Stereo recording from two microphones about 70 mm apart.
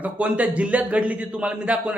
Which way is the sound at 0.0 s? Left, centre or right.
Centre.